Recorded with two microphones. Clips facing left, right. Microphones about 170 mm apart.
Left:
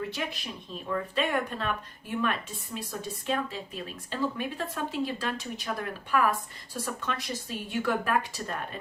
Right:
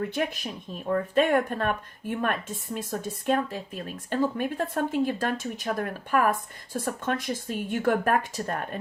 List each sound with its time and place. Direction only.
0.1 s speech: 50° right (ahead or behind)